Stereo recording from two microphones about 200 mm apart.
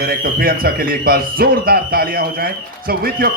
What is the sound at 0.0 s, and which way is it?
Speech, 50° right (ahead or behind).